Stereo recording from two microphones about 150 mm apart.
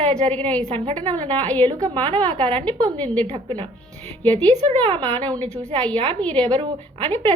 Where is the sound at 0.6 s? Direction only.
45° right (ahead or behind).